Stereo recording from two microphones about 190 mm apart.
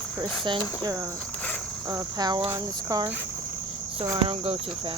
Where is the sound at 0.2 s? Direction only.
25° right (ahead or behind).